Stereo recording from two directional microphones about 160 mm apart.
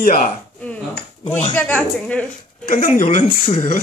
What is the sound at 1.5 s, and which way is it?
Speech, 10° left (ahead or behind).